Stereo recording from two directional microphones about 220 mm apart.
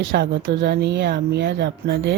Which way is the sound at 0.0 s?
55° right (ahead or behind).